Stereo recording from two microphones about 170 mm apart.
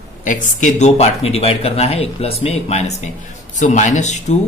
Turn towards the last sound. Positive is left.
turn(degrees=45)  # may be behind; listen again after turning